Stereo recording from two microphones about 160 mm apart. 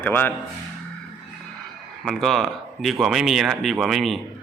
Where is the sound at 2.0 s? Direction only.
Centre (ahead or behind).